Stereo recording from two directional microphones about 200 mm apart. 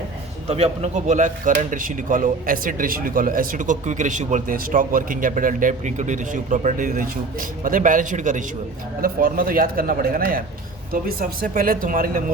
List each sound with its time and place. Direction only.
0.4 s a man's voice: 30° right (ahead or behind)